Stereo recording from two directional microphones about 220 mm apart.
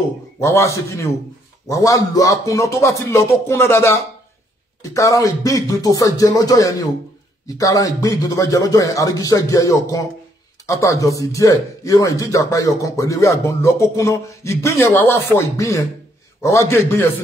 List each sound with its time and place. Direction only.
0.4 s speech: 15° left (ahead or behind)